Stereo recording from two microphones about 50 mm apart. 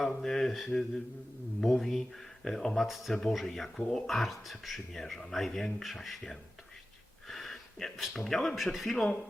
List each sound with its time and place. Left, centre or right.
0.0 s mantra: centre
1.6 s speech: centre
7.3 s a sound: centre
7.9 s speech: centre